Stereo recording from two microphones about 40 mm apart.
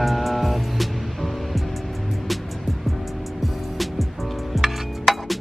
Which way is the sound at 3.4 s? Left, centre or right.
Centre.